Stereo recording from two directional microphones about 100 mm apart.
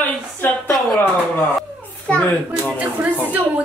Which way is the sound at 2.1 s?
10° left (ahead or behind).